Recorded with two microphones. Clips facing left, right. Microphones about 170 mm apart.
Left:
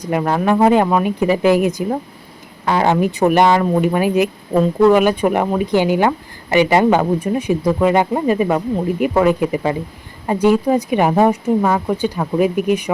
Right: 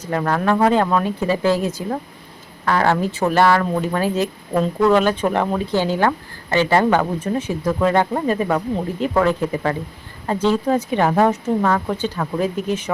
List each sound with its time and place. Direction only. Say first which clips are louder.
0.0 s speech: left 3 dB; 15° left (ahead or behind)